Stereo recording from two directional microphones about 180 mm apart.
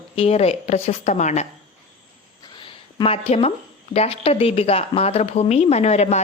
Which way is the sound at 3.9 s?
35° left (ahead or behind).